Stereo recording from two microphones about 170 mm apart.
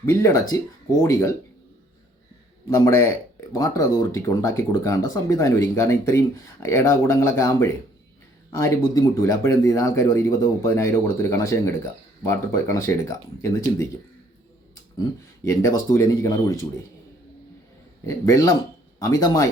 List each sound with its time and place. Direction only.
0.0 s speech: 15° left (ahead or behind)
2.6 s speech: 20° left (ahead or behind)
15.4 s speech: 20° left (ahead or behind)
18.0 s speech: 20° left (ahead or behind)